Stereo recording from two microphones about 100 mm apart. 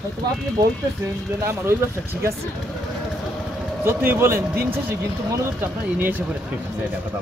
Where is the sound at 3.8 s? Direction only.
20° right (ahead or behind).